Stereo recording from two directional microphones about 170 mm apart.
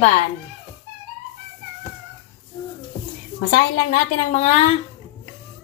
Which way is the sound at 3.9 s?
45° left (ahead or behind).